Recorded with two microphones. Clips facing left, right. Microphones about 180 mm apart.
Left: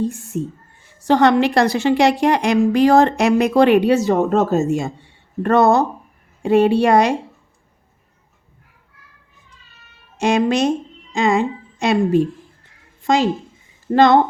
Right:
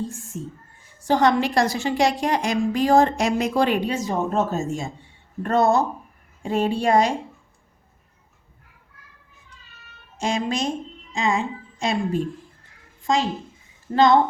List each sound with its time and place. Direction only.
0.1 s a woman's voice: 70° left (ahead or behind)
10.2 s a woman's voice: 70° left (ahead or behind)